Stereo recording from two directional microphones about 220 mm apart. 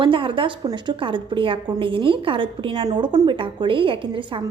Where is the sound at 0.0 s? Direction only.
20° right (ahead or behind).